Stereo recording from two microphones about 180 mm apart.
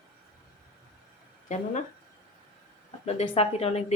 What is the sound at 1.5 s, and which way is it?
Speech, 45° left (ahead or behind).